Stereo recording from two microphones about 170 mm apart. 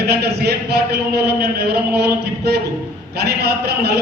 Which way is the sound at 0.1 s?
75° right (ahead or behind).